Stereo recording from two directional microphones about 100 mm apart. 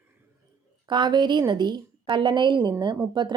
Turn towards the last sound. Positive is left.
turn(degrees=-50)  # may be behind; listen again after turning